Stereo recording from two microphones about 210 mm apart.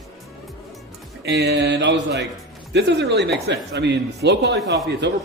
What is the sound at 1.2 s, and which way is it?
A man's voice, 50° right (ahead or behind).